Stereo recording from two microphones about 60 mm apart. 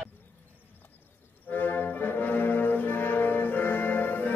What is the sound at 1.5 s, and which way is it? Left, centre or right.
Brass instrument, left.